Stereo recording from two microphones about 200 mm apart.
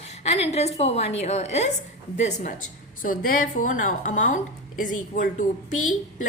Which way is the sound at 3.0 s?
45° left (ahead or behind).